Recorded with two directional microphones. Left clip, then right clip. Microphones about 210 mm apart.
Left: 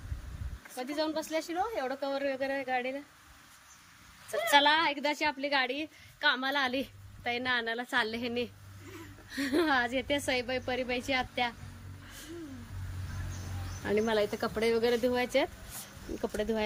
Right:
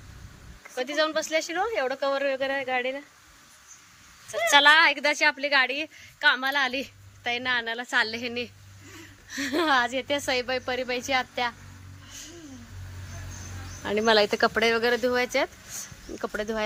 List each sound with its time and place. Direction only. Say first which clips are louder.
0.8 s a woman's voice: right 8 dB; centre (ahead or behind)
4.5 s a woman's voice: right 8 dB; 5° left (ahead or behind)
14.0 s speech: right 12 dB; 30° right (ahead or behind)
14.6 s a woman's voice: right 5 dB; centre (ahead or behind)